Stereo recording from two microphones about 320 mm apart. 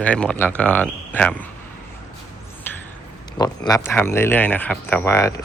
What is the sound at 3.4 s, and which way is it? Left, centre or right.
Speech, centre.